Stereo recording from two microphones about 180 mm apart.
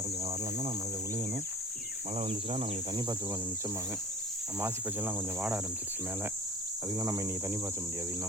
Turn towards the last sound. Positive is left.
turn(degrees=-15)  # may be behind; listen again after turning